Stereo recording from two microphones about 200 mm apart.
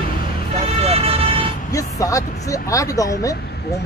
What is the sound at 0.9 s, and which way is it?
Vehicle, 30° right (ahead or behind).